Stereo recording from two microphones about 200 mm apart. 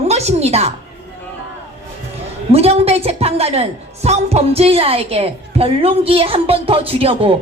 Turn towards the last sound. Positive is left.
turn(degrees=-30)  # may be behind; listen again after turning